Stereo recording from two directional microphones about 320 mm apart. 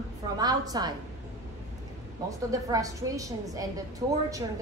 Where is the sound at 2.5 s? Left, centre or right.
Centre.